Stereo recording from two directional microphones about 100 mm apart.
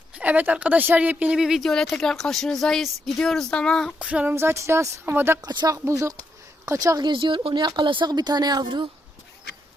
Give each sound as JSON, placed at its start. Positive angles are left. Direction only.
{"t": 0.1, "sound": "speech", "side_deg": -15}
{"t": 3.9, "sound": "speech", "side_deg": -15}
{"t": 5.4, "sound": "speech", "side_deg": -45}
{"t": 7.1, "sound": "speech", "side_deg": -55}